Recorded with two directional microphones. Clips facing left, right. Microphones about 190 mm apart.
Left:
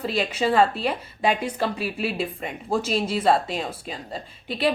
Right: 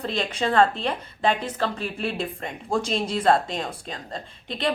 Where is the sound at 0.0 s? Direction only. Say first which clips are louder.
Left 2 dB; 5° left (ahead or behind).